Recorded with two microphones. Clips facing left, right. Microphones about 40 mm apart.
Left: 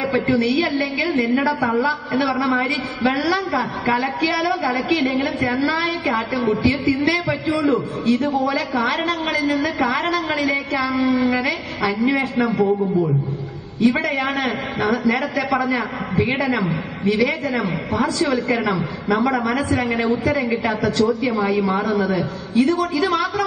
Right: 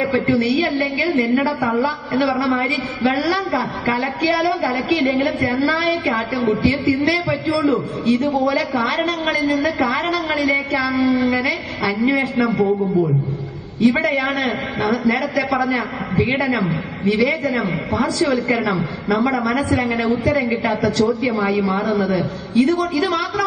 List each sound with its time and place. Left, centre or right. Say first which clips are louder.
0.0 s a woman's voice: right 1 dB; right
2.1 s a woman's voice: right 2 dB; right
12.6 s a man's voice: right 1 dB; centre
13.7 s a woman's voice: right 2 dB; right